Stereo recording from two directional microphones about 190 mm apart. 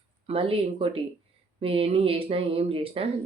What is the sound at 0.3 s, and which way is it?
Speech, 30° right (ahead or behind).